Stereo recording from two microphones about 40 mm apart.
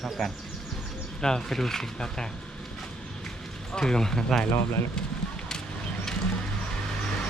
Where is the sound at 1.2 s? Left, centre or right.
Centre.